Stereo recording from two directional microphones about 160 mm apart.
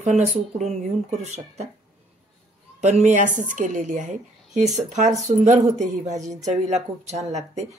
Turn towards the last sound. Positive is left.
turn(degrees=-45)  # may be behind; listen again after turning